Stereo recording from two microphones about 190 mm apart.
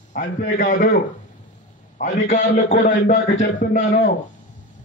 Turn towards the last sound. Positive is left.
turn(degrees=45)  # may be behind; listen again after turning